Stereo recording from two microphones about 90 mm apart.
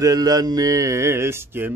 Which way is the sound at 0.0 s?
45° right (ahead or behind).